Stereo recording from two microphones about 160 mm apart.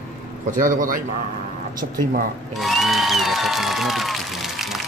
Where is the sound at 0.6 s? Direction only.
55° right (ahead or behind).